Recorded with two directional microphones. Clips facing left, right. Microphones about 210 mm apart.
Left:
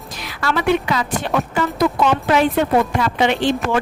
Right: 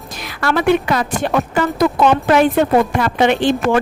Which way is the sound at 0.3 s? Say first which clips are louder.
Right 3 dB; 50° right (ahead or behind).